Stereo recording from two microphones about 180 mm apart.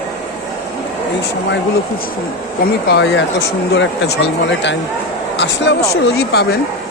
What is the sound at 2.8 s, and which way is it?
Speech, 80° left.